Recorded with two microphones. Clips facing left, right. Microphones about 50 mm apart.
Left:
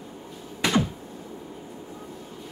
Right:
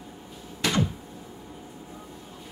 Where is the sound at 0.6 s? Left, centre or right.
Centre.